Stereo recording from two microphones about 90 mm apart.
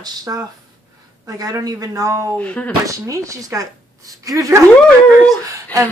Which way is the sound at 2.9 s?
40° right (ahead or behind).